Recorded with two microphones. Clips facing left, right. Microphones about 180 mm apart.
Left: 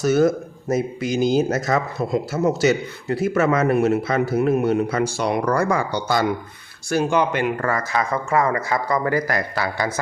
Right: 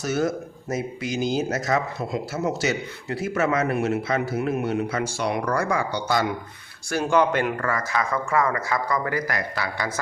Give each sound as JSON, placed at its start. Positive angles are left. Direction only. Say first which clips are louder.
{"t": 0.0, "sound": "speech", "louder": "left 7 dB", "side_deg": 50}
{"t": 6.9, "sound": "speech", "louder": "left 1 dB", "side_deg": 15}
{"t": 7.6, "sound": "speech", "louder": "left 3 dB", "side_deg": 30}